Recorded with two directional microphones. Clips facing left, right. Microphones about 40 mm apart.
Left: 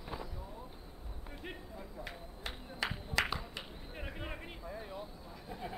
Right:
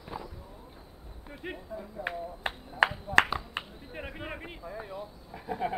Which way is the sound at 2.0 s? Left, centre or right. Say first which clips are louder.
Right 11 dB; right.